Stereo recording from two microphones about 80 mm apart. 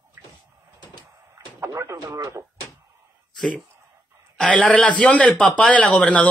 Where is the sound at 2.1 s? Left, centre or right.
Right.